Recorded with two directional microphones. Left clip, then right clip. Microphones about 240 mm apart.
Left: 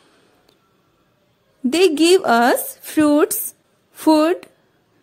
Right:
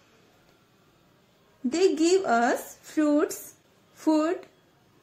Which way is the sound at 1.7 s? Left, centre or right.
Left.